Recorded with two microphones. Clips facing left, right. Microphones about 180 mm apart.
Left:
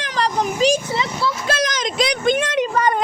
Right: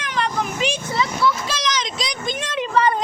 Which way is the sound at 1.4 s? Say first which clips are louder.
Left 4 dB; 50° left (ahead or behind).